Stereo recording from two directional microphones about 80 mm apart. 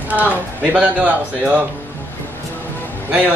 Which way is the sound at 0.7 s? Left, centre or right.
Centre.